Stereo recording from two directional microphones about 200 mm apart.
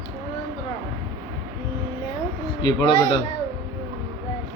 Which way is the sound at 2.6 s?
20° left (ahead or behind).